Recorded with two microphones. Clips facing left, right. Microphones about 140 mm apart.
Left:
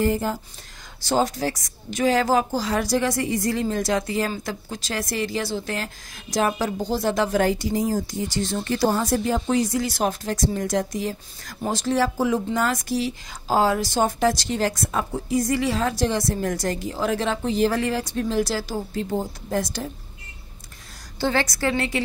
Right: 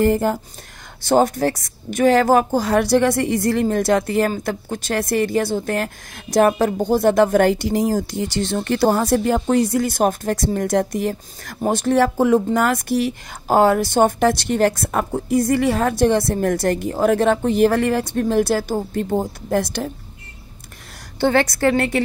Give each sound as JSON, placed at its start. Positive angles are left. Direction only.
{"t": 0.0, "sound": "a woman's voice", "side_deg": -60}
{"t": 21.2, "sound": "a woman's voice", "side_deg": -60}